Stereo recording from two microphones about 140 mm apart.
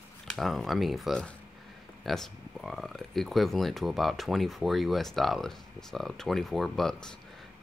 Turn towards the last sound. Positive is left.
turn(degrees=5)  # may be behind; listen again after turning